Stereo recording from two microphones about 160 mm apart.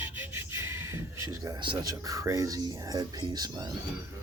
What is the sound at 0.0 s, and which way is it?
Speech, 10° right (ahead or behind).